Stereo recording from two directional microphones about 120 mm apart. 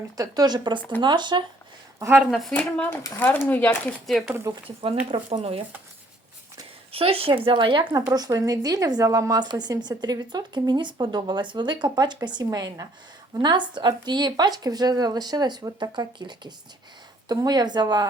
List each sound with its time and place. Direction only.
0.2 s speech: 35° right (ahead or behind)
2.0 s a woman's voice: 20° right (ahead or behind)
2.6 s speech: 10° left (ahead or behind)
4.3 s speech: 20° right (ahead or behind)
4.6 s speech: 50° right (ahead or behind)
6.9 s speech: 50° right (ahead or behind); by 18.1 s 35° right (ahead or behind)